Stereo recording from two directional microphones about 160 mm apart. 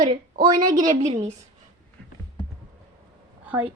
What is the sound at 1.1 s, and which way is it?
Speech, 45° right (ahead or behind).